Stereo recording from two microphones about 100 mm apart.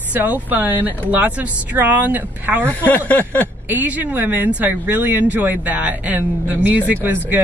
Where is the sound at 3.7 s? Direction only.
15° right (ahead or behind).